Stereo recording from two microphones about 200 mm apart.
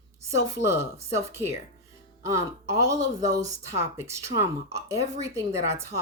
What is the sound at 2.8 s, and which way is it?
Speech, 15° right (ahead or behind).